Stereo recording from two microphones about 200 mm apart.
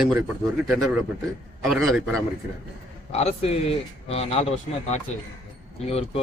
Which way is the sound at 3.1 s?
30° left (ahead or behind).